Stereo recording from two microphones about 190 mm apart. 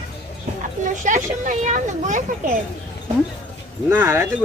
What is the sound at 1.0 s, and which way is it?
Speech, 40° right (ahead or behind).